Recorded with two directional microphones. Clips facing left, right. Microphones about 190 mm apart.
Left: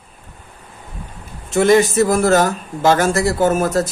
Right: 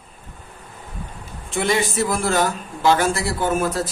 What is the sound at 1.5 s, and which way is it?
A man's voice, 45° left (ahead or behind).